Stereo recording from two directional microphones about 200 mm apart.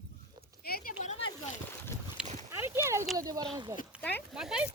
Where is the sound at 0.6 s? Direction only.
45° left (ahead or behind).